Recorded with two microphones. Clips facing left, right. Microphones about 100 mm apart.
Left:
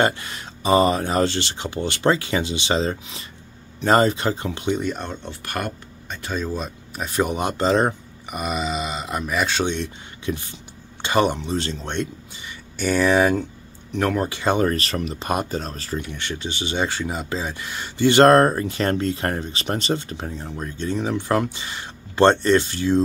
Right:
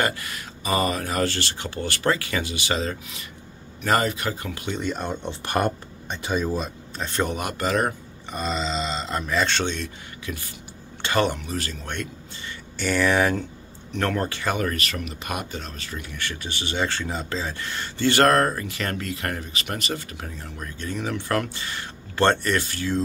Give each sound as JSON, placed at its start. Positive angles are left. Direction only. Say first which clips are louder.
{"t": 0.0, "sound": "speech", "louder": "left 5 dB", "side_deg": 25}
{"t": 4.7, "sound": "speech", "louder": "left 2 dB", "side_deg": 5}
{"t": 5.0, "sound": "speech", "louder": "right 3 dB", "side_deg": -15}
{"t": 6.3, "sound": "speech", "louder": "right 1 dB", "side_deg": -5}
{"t": 7.0, "sound": "speech", "louder": "left 3 dB", "side_deg": 10}
{"t": 7.3, "sound": "speech", "louder": "left 7 dB", "side_deg": 25}
{"t": 8.3, "sound": "speech", "louder": "left 2 dB", "side_deg": 15}
{"t": 9.8, "sound": "speech", "louder": "left 4 dB", "side_deg": 20}
{"t": 14.4, "sound": "speech", "louder": "left 5 dB", "side_deg": 30}
{"t": 16.1, "sound": "speech", "louder": "left 3 dB", "side_deg": 20}